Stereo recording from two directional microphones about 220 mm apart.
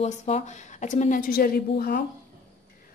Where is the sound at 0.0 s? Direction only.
30° left (ahead or behind).